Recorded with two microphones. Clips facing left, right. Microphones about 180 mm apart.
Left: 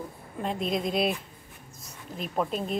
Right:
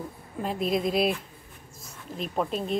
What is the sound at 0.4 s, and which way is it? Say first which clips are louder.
Speech: right 2 dB; 5° right (ahead or behind).